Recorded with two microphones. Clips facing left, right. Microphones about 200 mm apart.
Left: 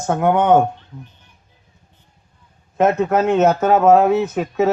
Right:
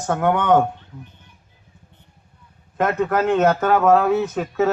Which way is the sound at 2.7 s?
25° left (ahead or behind).